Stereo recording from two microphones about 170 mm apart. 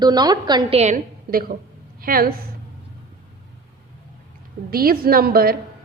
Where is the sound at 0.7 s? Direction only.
45° right (ahead or behind).